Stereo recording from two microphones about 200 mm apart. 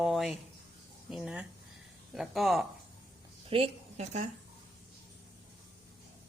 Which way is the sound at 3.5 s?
30° right (ahead or behind).